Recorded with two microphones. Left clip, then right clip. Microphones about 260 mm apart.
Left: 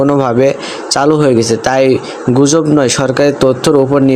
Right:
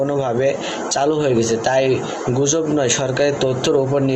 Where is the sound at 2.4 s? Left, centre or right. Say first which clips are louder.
Left 9 dB; left.